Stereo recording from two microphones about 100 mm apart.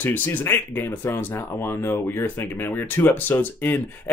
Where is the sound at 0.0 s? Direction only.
20° left (ahead or behind).